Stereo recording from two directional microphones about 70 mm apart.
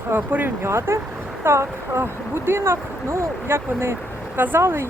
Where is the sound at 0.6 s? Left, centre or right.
Right.